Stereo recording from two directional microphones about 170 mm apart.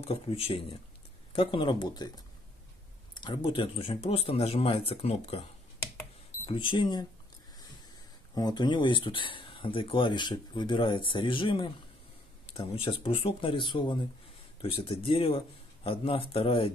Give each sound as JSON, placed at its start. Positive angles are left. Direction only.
{"t": 0.0, "sound": "speech", "side_deg": 35}
{"t": 6.4, "sound": "speech", "side_deg": 30}
{"t": 8.4, "sound": "speech", "side_deg": 25}